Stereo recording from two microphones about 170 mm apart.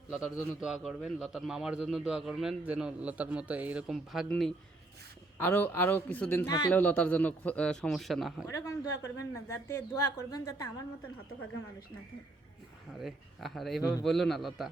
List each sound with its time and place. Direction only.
0.1 s a man's voice: 5° right (ahead or behind)
8.4 s a man's voice: 15° left (ahead or behind)
12.9 s a man's voice: centre (ahead or behind)